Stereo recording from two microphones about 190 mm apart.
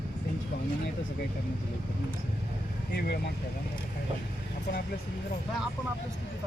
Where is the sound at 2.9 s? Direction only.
55° left (ahead or behind).